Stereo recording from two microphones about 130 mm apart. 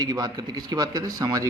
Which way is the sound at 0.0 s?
30° right (ahead or behind).